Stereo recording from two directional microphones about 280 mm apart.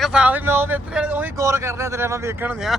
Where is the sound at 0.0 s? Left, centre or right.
Centre.